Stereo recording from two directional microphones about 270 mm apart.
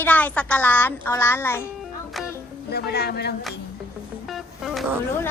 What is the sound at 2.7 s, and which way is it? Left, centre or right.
Speech, left.